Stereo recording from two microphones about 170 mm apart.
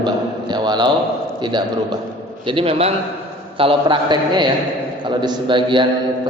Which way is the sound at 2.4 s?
30° right (ahead or behind).